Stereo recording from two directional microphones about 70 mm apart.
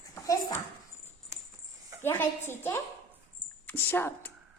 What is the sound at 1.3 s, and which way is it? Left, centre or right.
Music, right.